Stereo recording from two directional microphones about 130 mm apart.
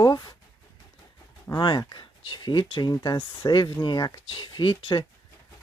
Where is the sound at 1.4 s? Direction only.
35° left (ahead or behind).